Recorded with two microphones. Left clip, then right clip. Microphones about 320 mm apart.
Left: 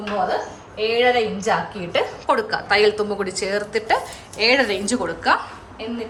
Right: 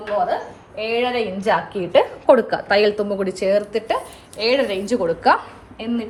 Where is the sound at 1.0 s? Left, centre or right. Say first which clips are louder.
Left 5 dB; centre.